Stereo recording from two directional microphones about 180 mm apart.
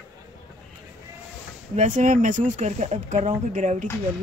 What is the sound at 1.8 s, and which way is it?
Speech, 45° right (ahead or behind).